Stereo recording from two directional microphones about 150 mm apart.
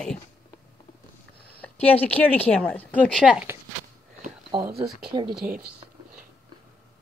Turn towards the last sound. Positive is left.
turn(degrees=-30)  # may be behind; listen again after turning